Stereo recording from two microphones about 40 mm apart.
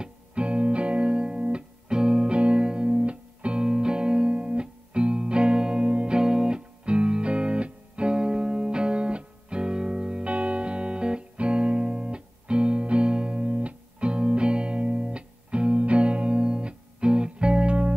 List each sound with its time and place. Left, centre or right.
0.0 s music: right
6.1 s music: right